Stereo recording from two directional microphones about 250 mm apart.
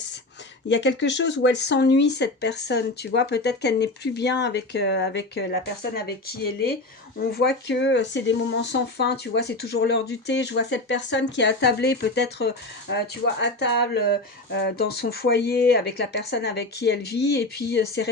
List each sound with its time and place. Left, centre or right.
0.7 s speech: left